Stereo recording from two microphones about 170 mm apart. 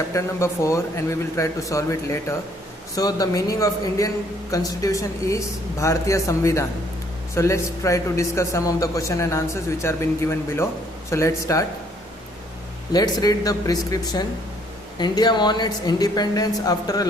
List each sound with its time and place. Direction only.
0.1 s a man's voice: 15° left (ahead or behind)
12.9 s a woman's voice: 25° left (ahead or behind)